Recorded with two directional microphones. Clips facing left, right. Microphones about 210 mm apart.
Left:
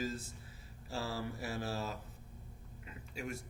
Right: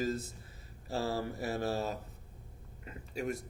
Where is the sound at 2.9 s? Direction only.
40° right (ahead or behind).